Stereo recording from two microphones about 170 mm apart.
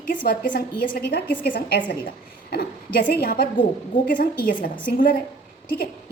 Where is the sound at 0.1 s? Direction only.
55° left (ahead or behind).